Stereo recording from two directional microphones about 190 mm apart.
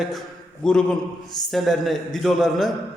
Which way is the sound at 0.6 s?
5° left (ahead or behind).